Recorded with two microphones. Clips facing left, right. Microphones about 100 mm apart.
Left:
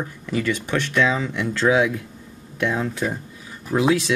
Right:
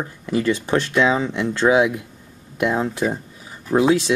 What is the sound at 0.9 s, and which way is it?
Speech, 25° right (ahead or behind).